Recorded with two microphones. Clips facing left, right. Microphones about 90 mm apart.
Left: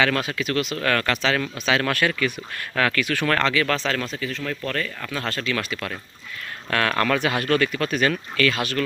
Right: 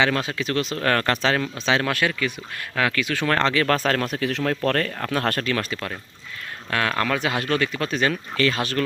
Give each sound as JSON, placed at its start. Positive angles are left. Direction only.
{"t": 0.0, "sound": "speech", "side_deg": -25}
{"t": 1.8, "sound": "speech", "side_deg": -20}
{"t": 3.8, "sound": "speech", "side_deg": -50}
{"t": 4.4, "sound": "speech", "side_deg": -55}
{"t": 5.5, "sound": "speech", "side_deg": -30}
{"t": 6.7, "sound": "speech", "side_deg": -15}